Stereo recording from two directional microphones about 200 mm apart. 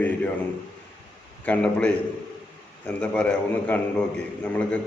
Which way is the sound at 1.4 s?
5° left (ahead or behind).